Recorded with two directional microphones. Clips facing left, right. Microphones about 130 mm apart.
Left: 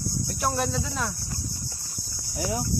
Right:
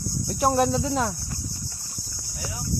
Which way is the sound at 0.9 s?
30° right (ahead or behind).